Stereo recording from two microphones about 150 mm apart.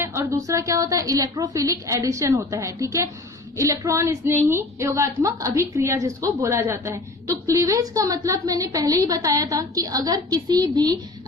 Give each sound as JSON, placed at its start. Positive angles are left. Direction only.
{"t": 0.0, "sound": "a woman's voice", "side_deg": -15}